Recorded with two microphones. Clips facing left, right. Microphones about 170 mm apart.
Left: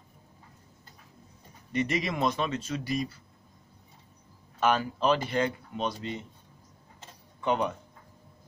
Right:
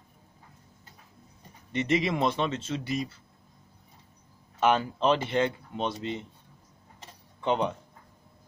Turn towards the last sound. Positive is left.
turn(degrees=-25)  # may be behind; listen again after turning